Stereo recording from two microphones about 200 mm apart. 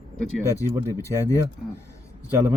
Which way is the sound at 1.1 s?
15° right (ahead or behind).